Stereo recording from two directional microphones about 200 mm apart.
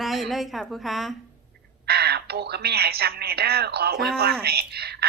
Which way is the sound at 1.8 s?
50° right (ahead or behind).